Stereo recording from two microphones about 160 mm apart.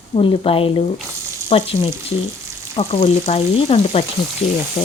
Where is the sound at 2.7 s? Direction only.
40° left (ahead or behind).